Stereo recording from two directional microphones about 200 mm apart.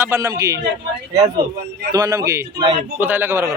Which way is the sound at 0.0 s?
15° right (ahead or behind).